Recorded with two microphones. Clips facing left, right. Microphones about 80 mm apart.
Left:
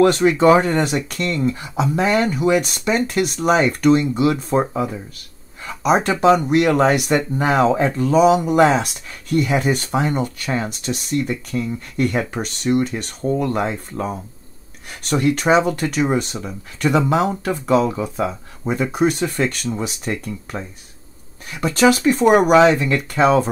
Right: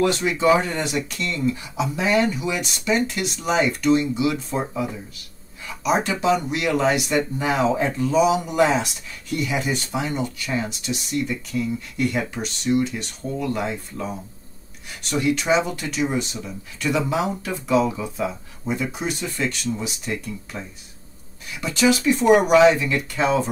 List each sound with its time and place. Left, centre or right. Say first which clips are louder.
0.0 s speech: left 6 dB; left